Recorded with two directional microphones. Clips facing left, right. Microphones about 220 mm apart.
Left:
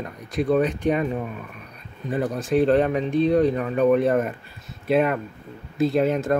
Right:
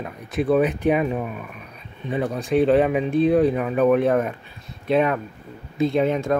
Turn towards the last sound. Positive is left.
turn(degrees=5)  # may be behind; listen again after turning